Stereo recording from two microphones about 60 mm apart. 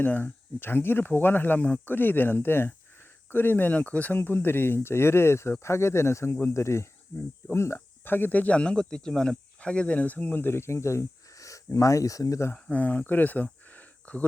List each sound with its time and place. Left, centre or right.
0.0 s speech: left
3.7 s speech: left
10.4 s speech: left
12.7 s speech: left